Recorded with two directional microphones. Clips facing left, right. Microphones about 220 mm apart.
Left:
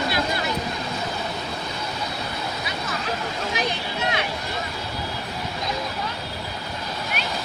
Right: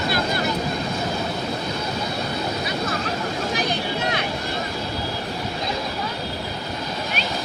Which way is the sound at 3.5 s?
35° right (ahead or behind).